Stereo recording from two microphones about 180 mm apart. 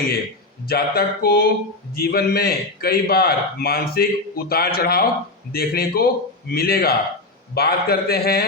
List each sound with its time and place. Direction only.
0.6 s a man's voice: 60° left (ahead or behind)